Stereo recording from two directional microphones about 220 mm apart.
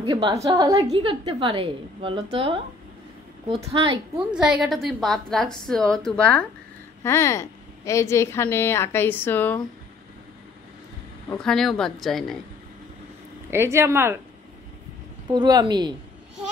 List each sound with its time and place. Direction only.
0.0 s a woman's voice: 20° right (ahead or behind)
3.6 s a woman's voice: 20° right (ahead or behind)
4.4 s a woman's voice: centre (ahead or behind)
11.2 s a woman's voice: 5° left (ahead or behind)
13.5 s speech: 10° right (ahead or behind)
15.3 s a woman's voice: 20° right (ahead or behind)